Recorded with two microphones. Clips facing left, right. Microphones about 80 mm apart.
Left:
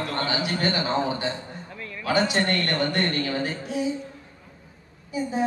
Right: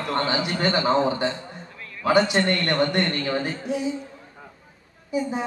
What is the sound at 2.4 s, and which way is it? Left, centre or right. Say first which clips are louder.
A man's voice: right 3 dB; right.